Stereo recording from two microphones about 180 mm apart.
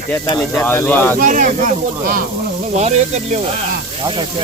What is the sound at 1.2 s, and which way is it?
Speech, 50° right (ahead or behind).